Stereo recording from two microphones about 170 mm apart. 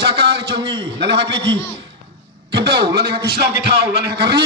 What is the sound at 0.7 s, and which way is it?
Speech, 90° right.